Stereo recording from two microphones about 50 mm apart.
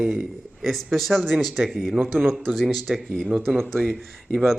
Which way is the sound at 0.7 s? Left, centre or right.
Centre.